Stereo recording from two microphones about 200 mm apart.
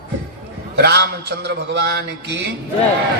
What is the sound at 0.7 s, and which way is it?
A man's voice, 55° right (ahead or behind).